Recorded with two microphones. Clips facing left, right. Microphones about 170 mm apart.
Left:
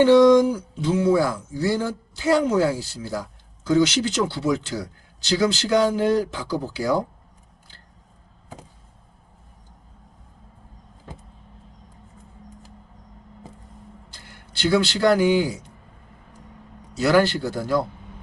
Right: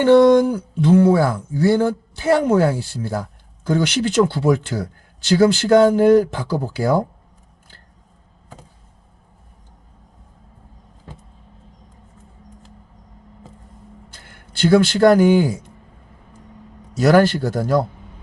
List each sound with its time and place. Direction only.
0.0 s speech: 55° right (ahead or behind)
14.1 s speech: 50° right (ahead or behind)
17.0 s speech: 45° right (ahead or behind)